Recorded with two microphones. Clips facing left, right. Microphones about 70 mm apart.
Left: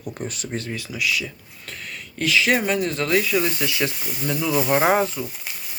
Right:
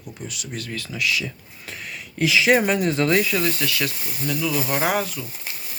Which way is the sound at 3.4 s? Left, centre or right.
Centre.